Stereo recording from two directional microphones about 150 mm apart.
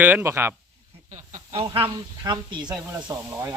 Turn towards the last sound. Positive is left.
turn(degrees=-20)  # may be behind; listen again after turning